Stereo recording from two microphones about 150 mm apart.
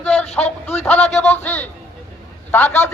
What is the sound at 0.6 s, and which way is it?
Speech, 10° left (ahead or behind).